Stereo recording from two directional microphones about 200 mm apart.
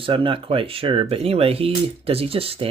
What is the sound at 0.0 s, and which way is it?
Speech, 25° right (ahead or behind).